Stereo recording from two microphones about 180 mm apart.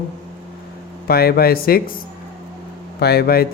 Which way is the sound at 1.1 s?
60° left (ahead or behind).